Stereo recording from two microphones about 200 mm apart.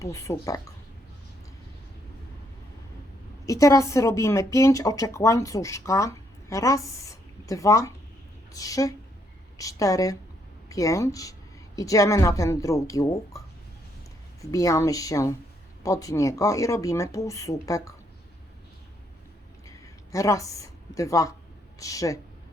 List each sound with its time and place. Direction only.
0.0 s a woman's voice: 15° left (ahead or behind)
3.4 s a woman's voice: 15° left (ahead or behind)
14.5 s a woman's voice: 15° left (ahead or behind)
19.6 s a sound: 15° left (ahead or behind)
21.8 s a woman's voice: 15° left (ahead or behind)